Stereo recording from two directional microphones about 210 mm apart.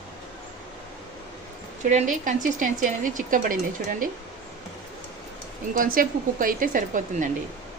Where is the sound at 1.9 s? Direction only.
35° right (ahead or behind).